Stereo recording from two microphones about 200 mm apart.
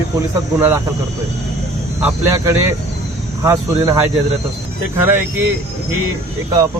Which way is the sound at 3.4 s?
15° right (ahead or behind).